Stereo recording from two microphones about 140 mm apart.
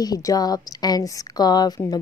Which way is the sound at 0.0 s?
25° left (ahead or behind).